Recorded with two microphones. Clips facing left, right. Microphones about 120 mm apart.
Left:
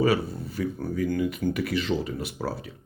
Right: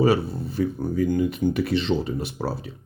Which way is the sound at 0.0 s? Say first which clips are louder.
Right 3 dB; 30° right (ahead or behind).